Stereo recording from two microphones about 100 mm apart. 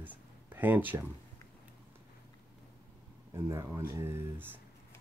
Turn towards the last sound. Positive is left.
turn(degrees=-20)  # may be behind; listen again after turning